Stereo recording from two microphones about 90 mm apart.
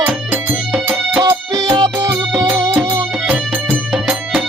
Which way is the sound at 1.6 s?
45° right (ahead or behind).